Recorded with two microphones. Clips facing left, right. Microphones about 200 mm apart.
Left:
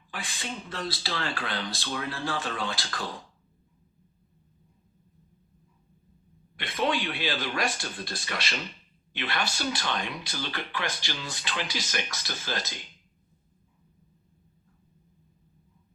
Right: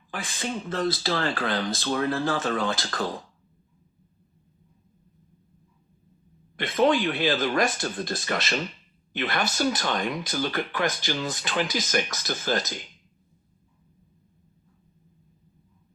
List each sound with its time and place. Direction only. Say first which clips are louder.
0.3 s speech: right 9 dB; 45° right (ahead or behind)
6.6 s speech: right 7 dB; 50° right (ahead or behind)